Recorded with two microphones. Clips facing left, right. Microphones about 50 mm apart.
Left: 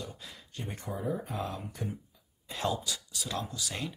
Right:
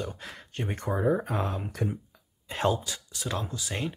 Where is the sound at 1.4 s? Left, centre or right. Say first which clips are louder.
Right 5 dB; right.